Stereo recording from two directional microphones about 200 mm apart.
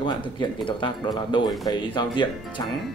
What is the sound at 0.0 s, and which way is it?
Speech, 25° left (ahead or behind).